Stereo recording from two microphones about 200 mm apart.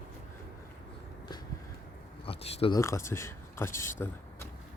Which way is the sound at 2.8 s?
15° left (ahead or behind).